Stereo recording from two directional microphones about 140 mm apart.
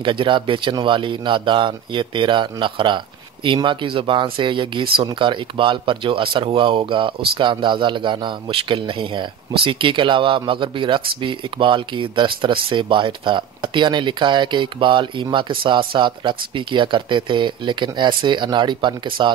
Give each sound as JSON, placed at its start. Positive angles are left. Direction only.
{"t": 0.0, "sound": "speech", "side_deg": -35}